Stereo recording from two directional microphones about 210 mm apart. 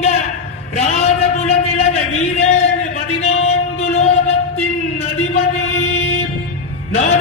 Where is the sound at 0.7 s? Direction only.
30° left (ahead or behind).